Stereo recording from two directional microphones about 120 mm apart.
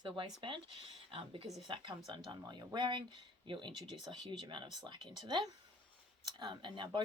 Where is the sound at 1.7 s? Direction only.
40° right (ahead or behind).